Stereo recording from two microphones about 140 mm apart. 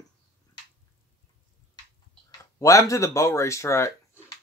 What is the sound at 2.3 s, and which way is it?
Speech, 25° left (ahead or behind).